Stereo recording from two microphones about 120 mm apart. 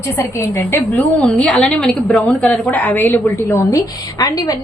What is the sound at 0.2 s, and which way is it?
A woman's voice, 20° left (ahead or behind).